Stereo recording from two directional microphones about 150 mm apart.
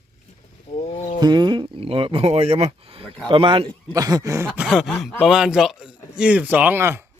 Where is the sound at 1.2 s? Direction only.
30° right (ahead or behind).